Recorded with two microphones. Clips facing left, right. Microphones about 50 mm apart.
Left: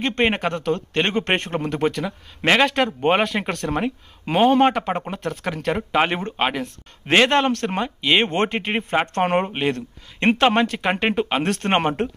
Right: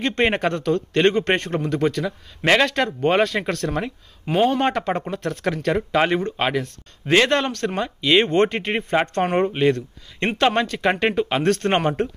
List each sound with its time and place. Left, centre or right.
0.0 s speech: centre
4.3 s speech: left
4.6 s speech: centre
7.1 s speech: left
9.1 s speech: left